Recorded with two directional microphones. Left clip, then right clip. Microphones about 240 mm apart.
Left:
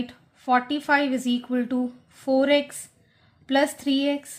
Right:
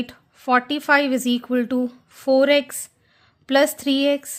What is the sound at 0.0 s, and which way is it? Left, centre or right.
Speech, right.